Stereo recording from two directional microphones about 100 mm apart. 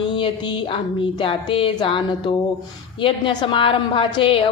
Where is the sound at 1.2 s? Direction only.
60° left (ahead or behind).